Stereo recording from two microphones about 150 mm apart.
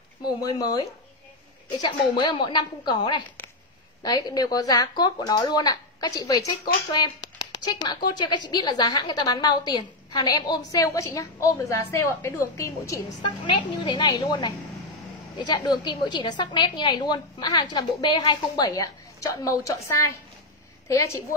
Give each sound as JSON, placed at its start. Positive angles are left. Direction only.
{"t": 0.4, "sound": "a woman's voice", "side_deg": 25}